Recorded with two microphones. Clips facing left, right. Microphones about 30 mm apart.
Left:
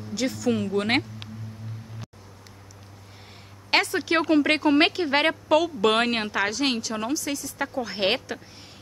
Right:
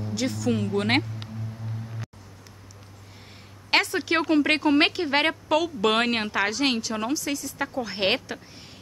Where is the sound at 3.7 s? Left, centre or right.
Centre.